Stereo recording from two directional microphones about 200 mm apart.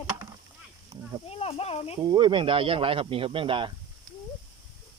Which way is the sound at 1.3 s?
30° left (ahead or behind).